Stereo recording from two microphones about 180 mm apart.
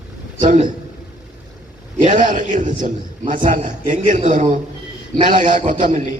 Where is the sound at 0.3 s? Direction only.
45° right (ahead or behind).